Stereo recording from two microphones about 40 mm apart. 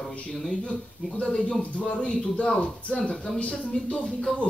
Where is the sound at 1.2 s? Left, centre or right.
Left.